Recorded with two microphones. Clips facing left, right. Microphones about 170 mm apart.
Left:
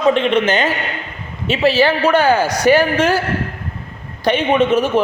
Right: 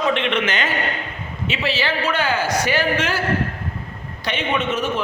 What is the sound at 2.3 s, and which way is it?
Speech, 40° left (ahead or behind).